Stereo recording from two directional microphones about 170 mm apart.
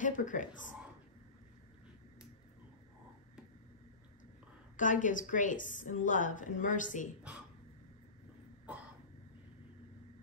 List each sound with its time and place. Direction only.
0.0 s speech: 50° left (ahead or behind)
4.7 s a woman's voice: 50° left (ahead or behind)